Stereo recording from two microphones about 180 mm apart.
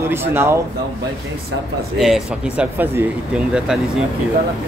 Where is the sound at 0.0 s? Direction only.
15° right (ahead or behind).